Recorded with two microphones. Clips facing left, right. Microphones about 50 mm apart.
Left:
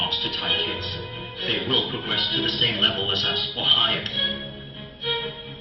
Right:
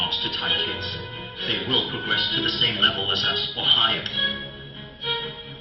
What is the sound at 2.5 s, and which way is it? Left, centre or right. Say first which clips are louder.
Music: right 2 dB; centre.